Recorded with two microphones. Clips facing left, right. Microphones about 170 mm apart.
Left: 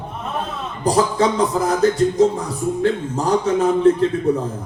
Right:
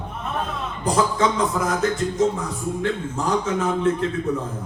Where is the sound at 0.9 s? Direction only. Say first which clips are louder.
Left 4 dB; 35° left (ahead or behind).